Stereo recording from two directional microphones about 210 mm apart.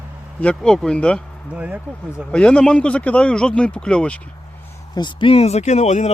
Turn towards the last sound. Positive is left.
turn(degrees=35)  # may be behind; listen again after turning